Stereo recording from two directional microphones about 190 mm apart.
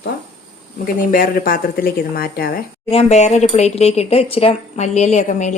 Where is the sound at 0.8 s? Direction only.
45° left (ahead or behind).